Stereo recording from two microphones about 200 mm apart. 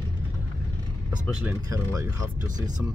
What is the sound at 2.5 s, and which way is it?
Speech, 20° right (ahead or behind).